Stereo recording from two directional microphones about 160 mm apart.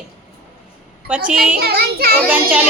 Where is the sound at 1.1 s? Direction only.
5° right (ahead or behind).